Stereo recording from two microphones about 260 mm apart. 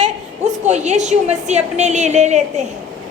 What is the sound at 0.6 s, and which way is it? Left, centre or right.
A woman's voice, right.